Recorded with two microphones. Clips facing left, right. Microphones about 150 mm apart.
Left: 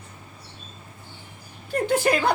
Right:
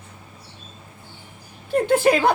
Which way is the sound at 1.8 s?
55° right (ahead or behind).